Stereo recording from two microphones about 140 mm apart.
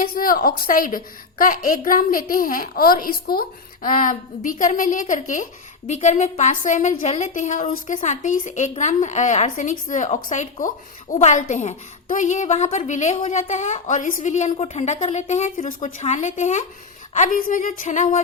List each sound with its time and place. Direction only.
0.1 s a woman's voice: 90° left
3.8 s a woman's voice: 75° left (ahead or behind)
5.9 s a woman's voice: 60° left (ahead or behind)
17.2 s a woman's voice: 70° left (ahead or behind)